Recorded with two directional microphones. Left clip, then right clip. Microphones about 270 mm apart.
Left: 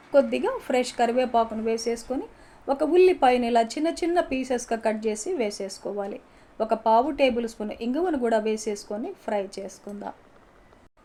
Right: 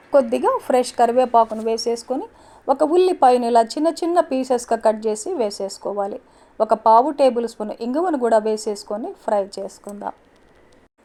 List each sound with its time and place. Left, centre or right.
0.1 s speech: right